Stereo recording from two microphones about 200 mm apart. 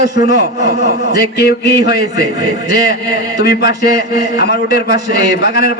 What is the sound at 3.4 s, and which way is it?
A man's voice, 55° left (ahead or behind).